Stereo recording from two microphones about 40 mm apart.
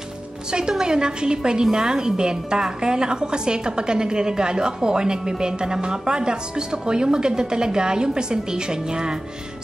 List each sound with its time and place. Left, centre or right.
0.5 s a woman's voice: right